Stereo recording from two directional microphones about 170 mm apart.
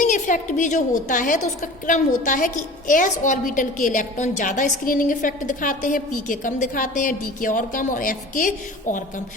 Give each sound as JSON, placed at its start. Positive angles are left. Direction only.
{"t": 0.0, "sound": "a woman's voice", "side_deg": 50}